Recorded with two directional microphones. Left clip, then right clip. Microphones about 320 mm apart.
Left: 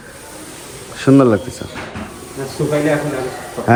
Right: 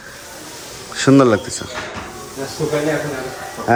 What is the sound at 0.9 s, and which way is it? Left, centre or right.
Speech, centre.